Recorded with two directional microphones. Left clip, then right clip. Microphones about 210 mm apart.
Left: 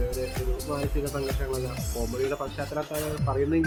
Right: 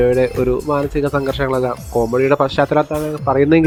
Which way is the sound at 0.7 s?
45° right (ahead or behind).